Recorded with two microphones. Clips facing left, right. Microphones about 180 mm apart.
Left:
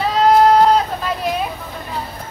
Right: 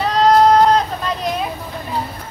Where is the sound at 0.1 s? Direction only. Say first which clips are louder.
Even; 5° left (ahead or behind).